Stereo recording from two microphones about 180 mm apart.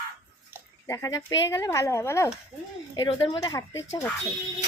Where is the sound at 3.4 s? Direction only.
20° left (ahead or behind).